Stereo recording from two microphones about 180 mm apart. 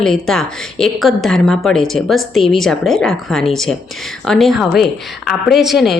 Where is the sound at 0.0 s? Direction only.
5° left (ahead or behind).